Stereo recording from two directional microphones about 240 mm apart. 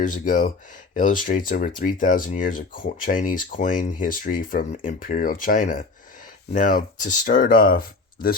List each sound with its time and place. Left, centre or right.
0.0 s speech: left